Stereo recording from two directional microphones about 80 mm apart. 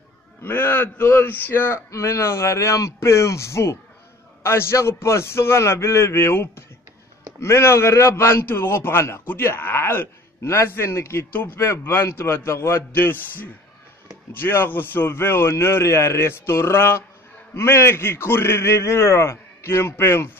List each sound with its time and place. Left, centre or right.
0.4 s a man's voice: left
1.9 s a man's voice: left